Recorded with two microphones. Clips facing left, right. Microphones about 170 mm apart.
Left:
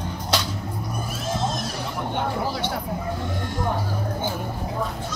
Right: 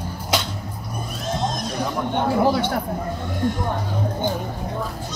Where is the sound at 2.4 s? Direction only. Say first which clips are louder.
Right 7 dB; 55° right (ahead or behind).